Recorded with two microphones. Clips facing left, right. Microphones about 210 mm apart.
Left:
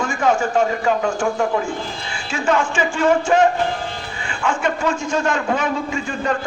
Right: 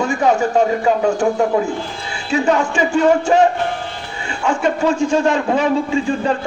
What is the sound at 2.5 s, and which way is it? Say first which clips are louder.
Speech: right 1 dB; 40° right (ahead or behind).